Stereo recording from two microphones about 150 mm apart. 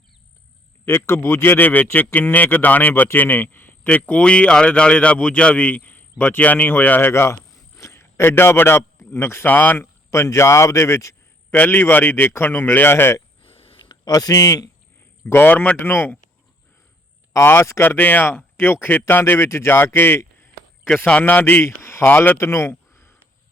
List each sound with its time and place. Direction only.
0.9 s speech: 15° left (ahead or behind)
13.4 s a sound: 40° left (ahead or behind)
15.3 s speech: 15° left (ahead or behind)
17.3 s a man's voice: 15° left (ahead or behind)